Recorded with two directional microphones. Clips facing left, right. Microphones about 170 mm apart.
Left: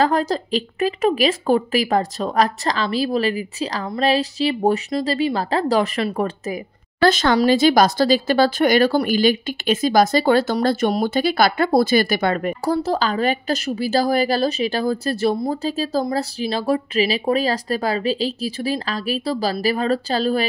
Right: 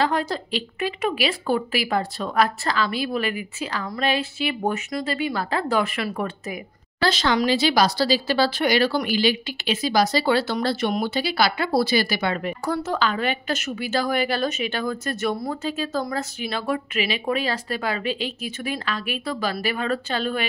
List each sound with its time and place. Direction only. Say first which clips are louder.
0.0 s a woman's voice: left 5 dB; 40° left (ahead or behind)
7.0 s speech: left 5 dB; 50° left (ahead or behind)
12.7 s a woman's voice: left 2 dB; 35° left (ahead or behind)